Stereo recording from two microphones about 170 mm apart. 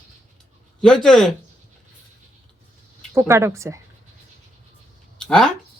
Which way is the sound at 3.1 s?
15° right (ahead or behind).